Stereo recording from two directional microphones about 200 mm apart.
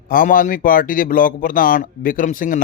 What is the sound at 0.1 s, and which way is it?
Speech, 45° left (ahead or behind).